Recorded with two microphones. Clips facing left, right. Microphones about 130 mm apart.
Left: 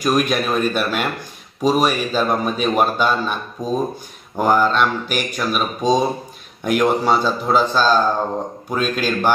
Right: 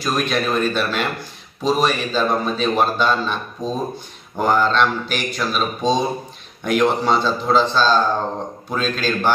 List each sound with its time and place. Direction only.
0.0 s a man's voice: 10° left (ahead or behind)